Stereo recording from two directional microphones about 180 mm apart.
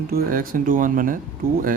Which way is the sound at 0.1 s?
50° right (ahead or behind).